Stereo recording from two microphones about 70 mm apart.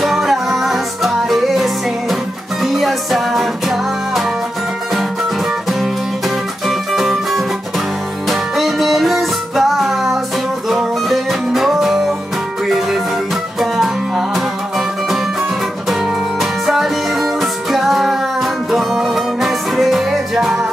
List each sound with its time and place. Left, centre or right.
0.0 s music: centre
6.9 s music: centre
13.6 s music: centre
15.9 s music: centre